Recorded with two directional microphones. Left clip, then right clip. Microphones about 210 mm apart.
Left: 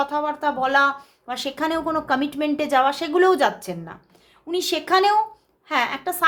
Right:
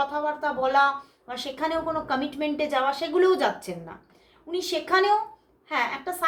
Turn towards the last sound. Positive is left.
turn(degrees=40)  # may be behind; listen again after turning